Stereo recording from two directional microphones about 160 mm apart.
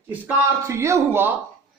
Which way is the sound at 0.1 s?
15° right (ahead or behind).